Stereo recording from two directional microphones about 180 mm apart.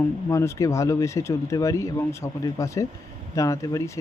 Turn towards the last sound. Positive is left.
turn(degrees=15)  # may be behind; listen again after turning